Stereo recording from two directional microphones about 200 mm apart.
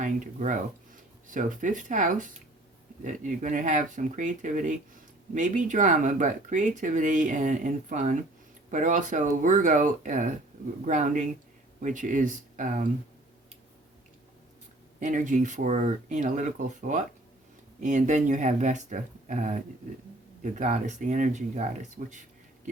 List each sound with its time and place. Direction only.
0.0 s speech: 40° right (ahead or behind)
14.9 s speech: 40° right (ahead or behind)
22.1 s a sound: 40° right (ahead or behind)